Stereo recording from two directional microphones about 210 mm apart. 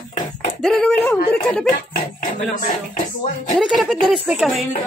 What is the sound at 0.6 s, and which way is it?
A woman's voice, centre (ahead or behind).